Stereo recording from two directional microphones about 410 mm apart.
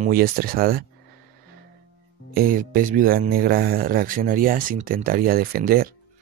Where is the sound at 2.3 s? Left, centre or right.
Centre.